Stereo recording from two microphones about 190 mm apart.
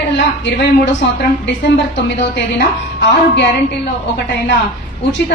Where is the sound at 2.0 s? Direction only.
70° left (ahead or behind).